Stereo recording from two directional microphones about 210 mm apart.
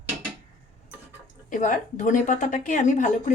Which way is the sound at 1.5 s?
40° left (ahead or behind).